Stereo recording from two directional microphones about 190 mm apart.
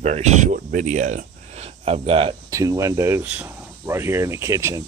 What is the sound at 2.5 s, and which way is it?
Speech, 15° right (ahead or behind).